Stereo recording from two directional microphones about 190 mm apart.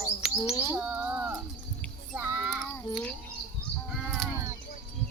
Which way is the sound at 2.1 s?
10° right (ahead or behind).